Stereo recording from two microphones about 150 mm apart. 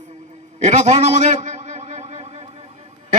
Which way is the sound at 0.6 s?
50° right (ahead or behind).